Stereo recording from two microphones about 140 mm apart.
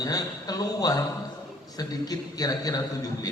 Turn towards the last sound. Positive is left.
turn(degrees=25)  # may be behind; listen again after turning